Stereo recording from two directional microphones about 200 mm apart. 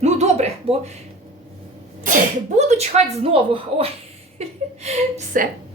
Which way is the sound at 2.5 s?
35° right (ahead or behind).